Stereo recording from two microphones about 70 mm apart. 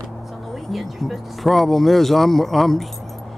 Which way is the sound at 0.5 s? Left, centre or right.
Centre.